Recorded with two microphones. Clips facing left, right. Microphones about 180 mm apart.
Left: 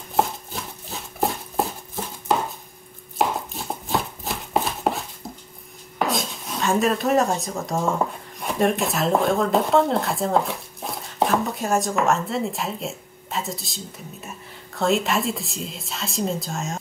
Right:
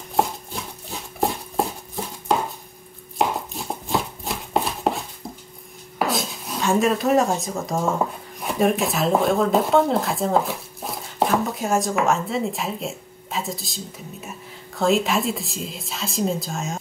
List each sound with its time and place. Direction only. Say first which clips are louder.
0.1 s a sound: even; centre (ahead or behind)
3.2 s chopping: even; centre (ahead or behind)
5.9 s dishes: even; centre (ahead or behind)